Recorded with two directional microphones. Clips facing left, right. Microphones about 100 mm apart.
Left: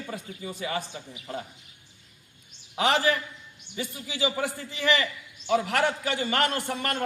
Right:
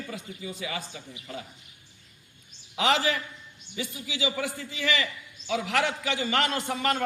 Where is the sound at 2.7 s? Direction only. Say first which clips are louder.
Left 1 dB; 40° left (ahead or behind).